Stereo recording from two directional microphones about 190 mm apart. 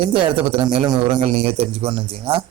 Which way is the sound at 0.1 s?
25° right (ahead or behind).